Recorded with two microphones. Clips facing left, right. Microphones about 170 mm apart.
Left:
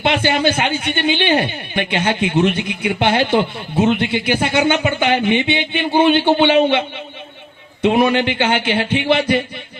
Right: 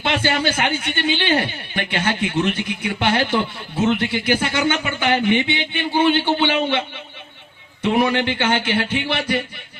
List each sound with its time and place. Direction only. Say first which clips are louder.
0.0 s a man's voice: left 4 dB; 15° left (ahead or behind)
7.9 s speech: left 4 dB; 15° left (ahead or behind)